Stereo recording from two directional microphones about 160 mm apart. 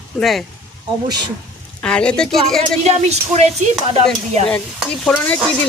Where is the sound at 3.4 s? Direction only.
40° right (ahead or behind).